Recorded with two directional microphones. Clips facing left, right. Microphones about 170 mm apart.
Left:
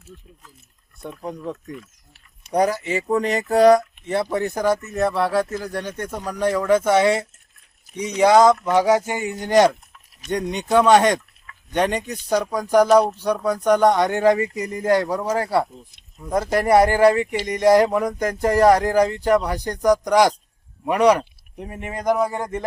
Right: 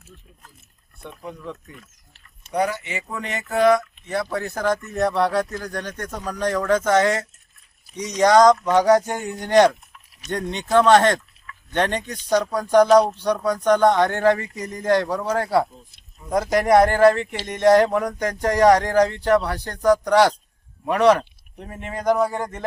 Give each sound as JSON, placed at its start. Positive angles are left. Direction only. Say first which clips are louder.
{"t": 1.0, "sound": "speech", "louder": "left 4 dB", "side_deg": 40}
{"t": 22.4, "sound": "speech", "louder": "left 2 dB", "side_deg": 20}